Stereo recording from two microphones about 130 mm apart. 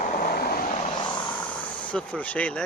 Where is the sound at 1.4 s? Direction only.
10° left (ahead or behind).